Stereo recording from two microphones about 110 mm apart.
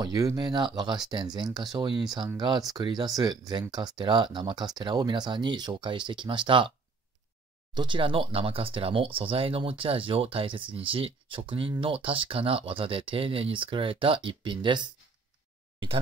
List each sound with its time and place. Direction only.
0.0 s speech: 35° right (ahead or behind)
7.7 s speech: 45° right (ahead or behind)